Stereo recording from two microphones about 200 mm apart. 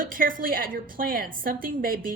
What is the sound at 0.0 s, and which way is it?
A woman's voice, 45° right (ahead or behind).